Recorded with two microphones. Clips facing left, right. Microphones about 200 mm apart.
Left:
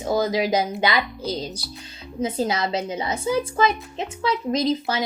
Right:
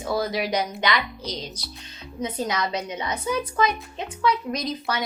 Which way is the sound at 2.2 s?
25° left (ahead or behind).